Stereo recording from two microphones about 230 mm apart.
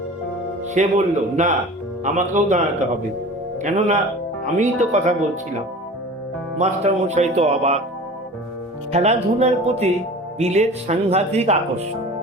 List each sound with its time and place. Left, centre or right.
0.7 s a man's voice: right
3.6 s a man's voice: right
6.6 s speech: right
8.9 s speech: right